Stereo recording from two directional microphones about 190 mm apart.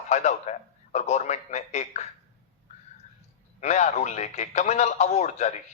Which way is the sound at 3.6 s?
35° left (ahead or behind).